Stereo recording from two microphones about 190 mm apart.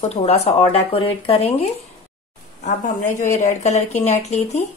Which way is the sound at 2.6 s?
40° left (ahead or behind).